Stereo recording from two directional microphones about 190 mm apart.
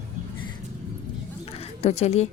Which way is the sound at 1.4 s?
30° left (ahead or behind).